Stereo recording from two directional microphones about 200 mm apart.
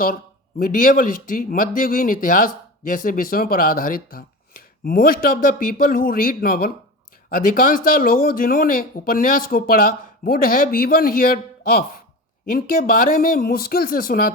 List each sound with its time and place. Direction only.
0.6 s speech: 45° left (ahead or behind)